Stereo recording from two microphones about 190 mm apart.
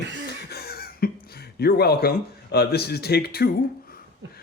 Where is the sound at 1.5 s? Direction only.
55° left (ahead or behind).